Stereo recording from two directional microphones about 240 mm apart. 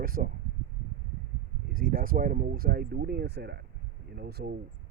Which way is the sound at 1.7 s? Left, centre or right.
Right.